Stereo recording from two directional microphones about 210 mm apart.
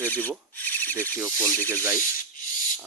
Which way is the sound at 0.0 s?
10° left (ahead or behind).